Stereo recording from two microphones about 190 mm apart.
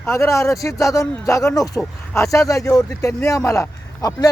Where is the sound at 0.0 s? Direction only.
15° left (ahead or behind).